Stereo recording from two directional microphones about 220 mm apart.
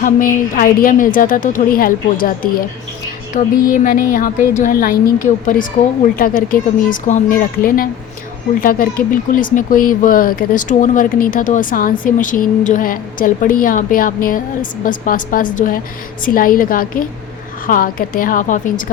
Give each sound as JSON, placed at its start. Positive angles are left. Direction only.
{"t": 0.0, "sound": "speech", "side_deg": 40}